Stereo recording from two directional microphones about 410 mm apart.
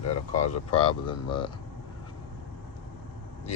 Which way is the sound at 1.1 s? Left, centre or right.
Centre.